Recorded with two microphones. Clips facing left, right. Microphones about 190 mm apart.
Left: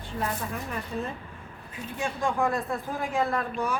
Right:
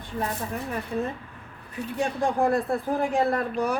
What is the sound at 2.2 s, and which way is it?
Speech, 35° right (ahead or behind).